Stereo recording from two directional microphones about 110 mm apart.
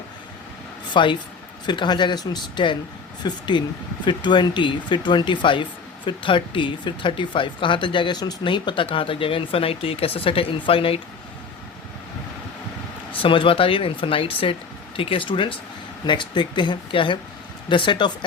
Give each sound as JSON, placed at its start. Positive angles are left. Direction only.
{"t": 0.9, "sound": "speech", "side_deg": 45}
{"t": 13.1, "sound": "speech", "side_deg": 50}